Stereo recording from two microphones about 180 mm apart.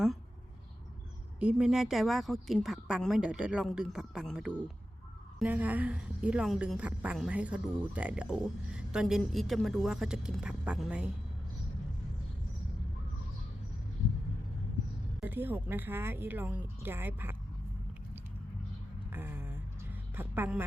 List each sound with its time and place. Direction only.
1.4 s a woman's voice: 5° right (ahead or behind)
15.2 s a woman's voice: 10° right (ahead or behind)
19.1 s a sound: 10° right (ahead or behind)
20.1 s speech: 10° right (ahead or behind)